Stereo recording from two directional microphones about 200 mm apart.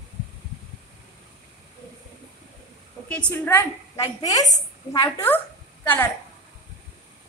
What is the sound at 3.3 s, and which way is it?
A woman's voice, 10° left (ahead or behind).